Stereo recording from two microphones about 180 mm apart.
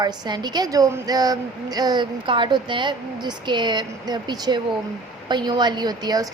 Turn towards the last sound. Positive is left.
turn(degrees=-20)  # may be behind; listen again after turning